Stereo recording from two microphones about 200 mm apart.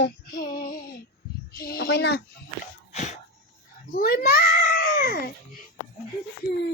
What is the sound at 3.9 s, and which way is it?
A child's voice, 45° left (ahead or behind).